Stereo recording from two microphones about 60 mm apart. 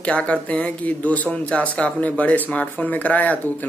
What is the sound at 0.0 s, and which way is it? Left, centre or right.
Speech, left.